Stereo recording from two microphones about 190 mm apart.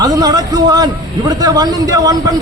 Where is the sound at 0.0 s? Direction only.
20° right (ahead or behind).